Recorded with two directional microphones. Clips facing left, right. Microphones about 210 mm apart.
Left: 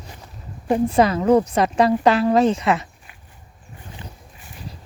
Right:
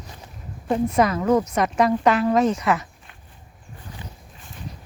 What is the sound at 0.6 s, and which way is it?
A woman's voice, 30° left (ahead or behind).